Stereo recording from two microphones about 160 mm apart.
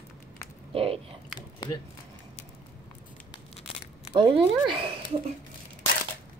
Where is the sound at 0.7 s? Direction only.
35° right (ahead or behind).